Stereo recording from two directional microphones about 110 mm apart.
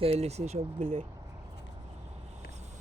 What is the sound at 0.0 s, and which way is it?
Speech, 65° right (ahead or behind).